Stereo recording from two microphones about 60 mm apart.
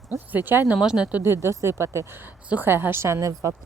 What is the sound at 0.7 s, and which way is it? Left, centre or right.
Speech, centre.